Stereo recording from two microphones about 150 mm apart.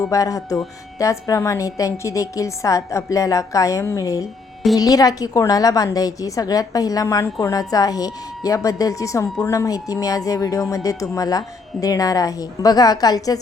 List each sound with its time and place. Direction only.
0.0 s a woman's voice: 20° left (ahead or behind)